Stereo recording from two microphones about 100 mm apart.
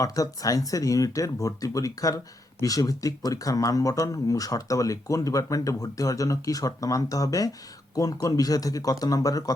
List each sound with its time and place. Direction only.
0.0 s speech: 35° left (ahead or behind)